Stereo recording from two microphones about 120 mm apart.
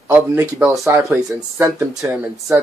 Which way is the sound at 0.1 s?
20° right (ahead or behind).